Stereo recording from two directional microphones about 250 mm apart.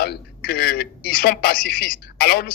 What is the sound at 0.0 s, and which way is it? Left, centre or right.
A man's voice, left.